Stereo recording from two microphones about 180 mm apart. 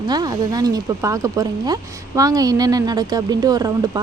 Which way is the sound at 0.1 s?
20° right (ahead or behind).